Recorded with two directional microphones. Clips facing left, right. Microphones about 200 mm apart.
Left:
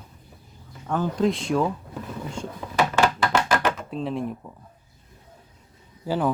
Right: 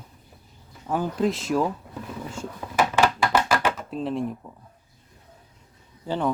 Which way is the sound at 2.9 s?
5° right (ahead or behind).